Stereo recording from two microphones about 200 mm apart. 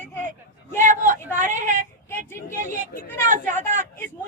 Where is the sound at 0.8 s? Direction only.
40° right (ahead or behind).